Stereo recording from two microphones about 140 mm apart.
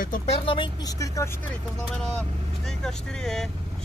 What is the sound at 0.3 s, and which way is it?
Speech, 35° left (ahead or behind).